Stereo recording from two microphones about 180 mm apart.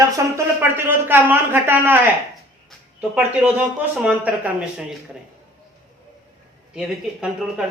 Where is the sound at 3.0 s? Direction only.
5° right (ahead or behind).